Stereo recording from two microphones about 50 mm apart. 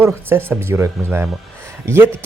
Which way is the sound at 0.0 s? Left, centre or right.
Right.